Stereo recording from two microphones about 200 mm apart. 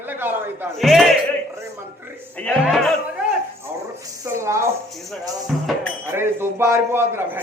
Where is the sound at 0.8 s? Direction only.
Centre (ahead or behind).